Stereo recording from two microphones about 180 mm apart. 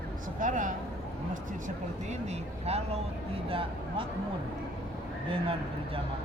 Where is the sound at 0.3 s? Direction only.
45° right (ahead or behind).